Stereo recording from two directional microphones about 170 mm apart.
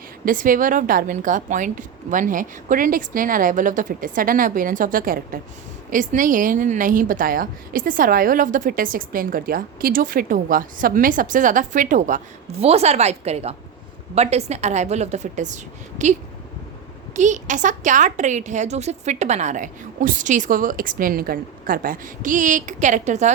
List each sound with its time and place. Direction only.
0.3 s a woman's voice: 55° right (ahead or behind)
17.2 s a woman's voice: 45° right (ahead or behind)